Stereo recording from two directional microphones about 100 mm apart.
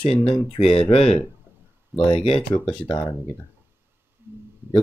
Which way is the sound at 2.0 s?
65° left (ahead or behind).